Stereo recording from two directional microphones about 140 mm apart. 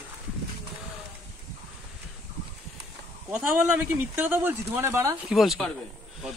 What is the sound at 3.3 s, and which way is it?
Speech, 10° right (ahead or behind).